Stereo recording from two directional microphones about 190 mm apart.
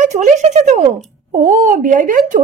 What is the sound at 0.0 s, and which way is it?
Speech, 40° right (ahead or behind).